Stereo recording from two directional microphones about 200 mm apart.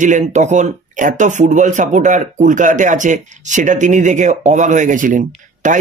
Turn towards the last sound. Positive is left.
turn(degrees=-40)  # may be behind; listen again after turning